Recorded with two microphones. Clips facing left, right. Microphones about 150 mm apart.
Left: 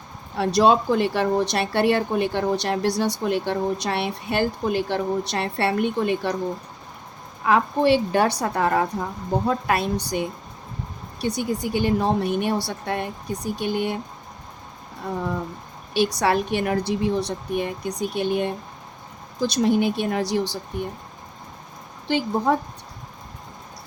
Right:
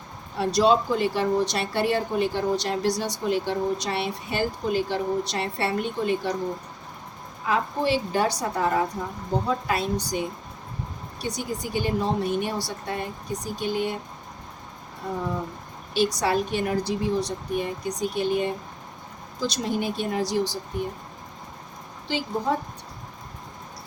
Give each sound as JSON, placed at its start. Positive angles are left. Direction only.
{"t": 0.3, "sound": "speech", "side_deg": 60}
{"t": 7.4, "sound": "speech", "side_deg": 60}
{"t": 16.1, "sound": "speech", "side_deg": 65}
{"t": 22.0, "sound": "speech", "side_deg": 55}